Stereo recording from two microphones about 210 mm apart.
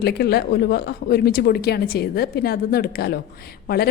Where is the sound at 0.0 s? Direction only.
50° left (ahead or behind).